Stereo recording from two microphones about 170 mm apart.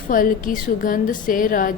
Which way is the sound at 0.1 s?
55° left (ahead or behind).